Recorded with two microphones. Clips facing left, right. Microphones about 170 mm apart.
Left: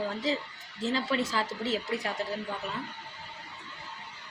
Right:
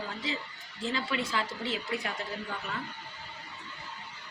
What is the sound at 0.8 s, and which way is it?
A man's voice, 40° left (ahead or behind).